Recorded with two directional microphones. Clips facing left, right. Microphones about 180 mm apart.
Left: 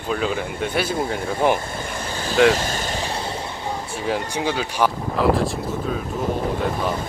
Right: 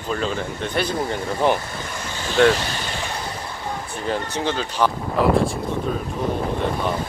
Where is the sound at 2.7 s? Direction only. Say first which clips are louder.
Left 3 dB; 45° left (ahead or behind).